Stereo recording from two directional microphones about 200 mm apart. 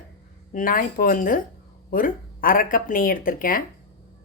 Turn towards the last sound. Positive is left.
turn(degrees=45)  # may be behind; listen again after turning